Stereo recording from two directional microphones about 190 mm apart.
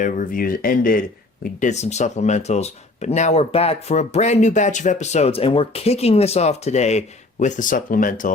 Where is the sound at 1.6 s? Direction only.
35° left (ahead or behind).